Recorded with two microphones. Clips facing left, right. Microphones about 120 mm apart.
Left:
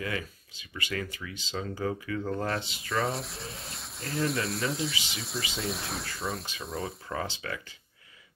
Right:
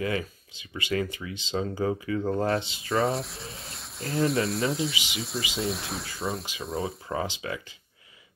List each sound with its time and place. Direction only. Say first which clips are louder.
0.0 s speech: right 5 dB; 25° right (ahead or behind)
2.9 s speech: right 5 dB; centre (ahead or behind)
7.1 s speech: right 3 dB; 20° right (ahead or behind)